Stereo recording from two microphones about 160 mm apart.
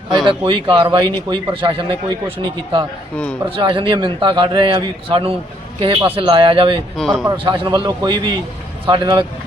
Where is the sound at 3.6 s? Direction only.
30° right (ahead or behind).